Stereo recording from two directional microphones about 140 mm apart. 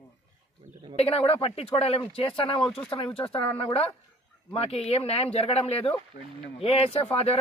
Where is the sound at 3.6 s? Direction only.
45° left (ahead or behind).